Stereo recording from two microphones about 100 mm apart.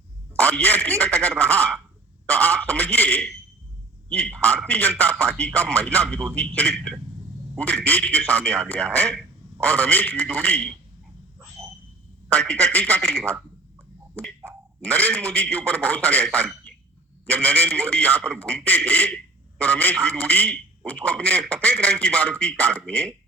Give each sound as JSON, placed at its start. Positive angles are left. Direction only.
{"t": 0.3, "sound": "a man's voice", "side_deg": 10}
{"t": 2.3, "sound": "a sound", "side_deg": 15}
{"t": 4.1, "sound": "a man's voice", "side_deg": 10}
{"t": 11.6, "sound": "a sound", "side_deg": 5}
{"t": 12.3, "sound": "a man's voice", "side_deg": 10}
{"t": 14.8, "sound": "a man's voice", "side_deg": 15}